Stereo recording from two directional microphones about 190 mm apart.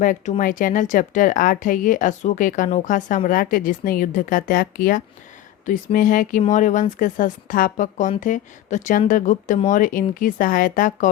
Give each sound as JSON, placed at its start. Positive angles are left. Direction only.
{"t": 0.0, "sound": "a woman's voice", "side_deg": 45}